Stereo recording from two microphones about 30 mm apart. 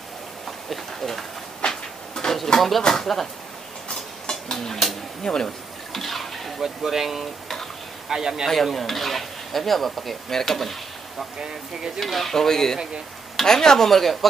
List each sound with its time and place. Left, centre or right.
0.5 s speech: centre
1.6 s train: left
2.2 s a sound: left
2.9 s speech: centre
3.9 s a sound: centre
5.2 s speech: left
5.9 s a sound: centre
6.6 s speech: centre
8.1 s speech: right
8.7 s speech: centre
11.3 s speech: right
12.0 s speech: centre